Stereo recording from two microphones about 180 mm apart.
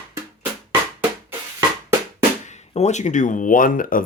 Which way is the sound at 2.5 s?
40° left (ahead or behind).